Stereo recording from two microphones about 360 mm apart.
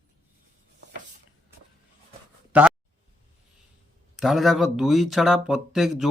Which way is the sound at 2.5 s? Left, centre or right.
Centre.